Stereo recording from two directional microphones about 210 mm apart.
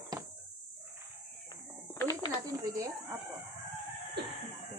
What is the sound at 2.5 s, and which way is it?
Speech, 15° right (ahead or behind).